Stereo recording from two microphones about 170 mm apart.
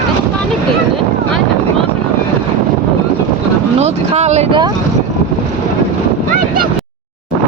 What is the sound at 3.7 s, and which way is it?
Vehicle, 40° right (ahead or behind).